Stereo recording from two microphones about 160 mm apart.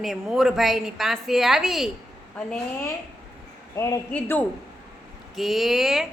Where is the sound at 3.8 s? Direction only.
20° left (ahead or behind).